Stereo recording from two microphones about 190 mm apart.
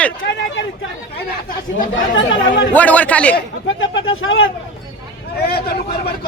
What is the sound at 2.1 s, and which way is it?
Speech, 80° left.